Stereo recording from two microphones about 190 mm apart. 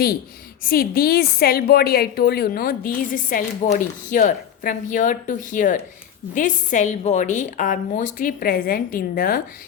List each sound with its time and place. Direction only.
0.6 s a woman's voice: 50° left (ahead or behind)